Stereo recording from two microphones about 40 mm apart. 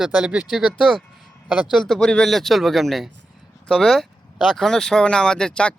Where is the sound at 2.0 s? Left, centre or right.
Left.